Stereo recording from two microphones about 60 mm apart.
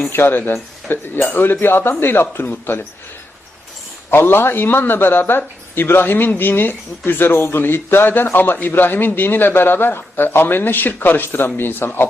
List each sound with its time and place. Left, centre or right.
0.1 s a man's voice: left
4.1 s a man's voice: left